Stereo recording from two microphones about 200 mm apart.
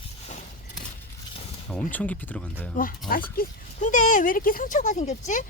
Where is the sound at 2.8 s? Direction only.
45° left (ahead or behind).